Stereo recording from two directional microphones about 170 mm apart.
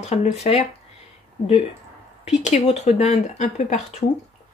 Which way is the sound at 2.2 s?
40° left (ahead or behind).